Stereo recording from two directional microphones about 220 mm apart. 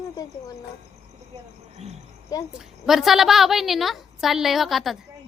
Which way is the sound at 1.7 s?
30° right (ahead or behind).